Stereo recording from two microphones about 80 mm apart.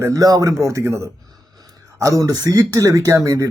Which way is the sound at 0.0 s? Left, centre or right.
Right.